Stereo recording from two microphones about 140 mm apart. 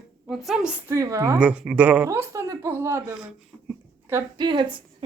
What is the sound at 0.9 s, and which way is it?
Speech, 20° right (ahead or behind).